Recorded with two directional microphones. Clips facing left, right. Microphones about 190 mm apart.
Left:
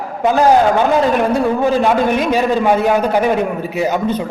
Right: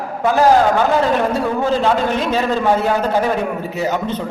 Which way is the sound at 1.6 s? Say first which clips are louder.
Left 1 dB; 15° left (ahead or behind).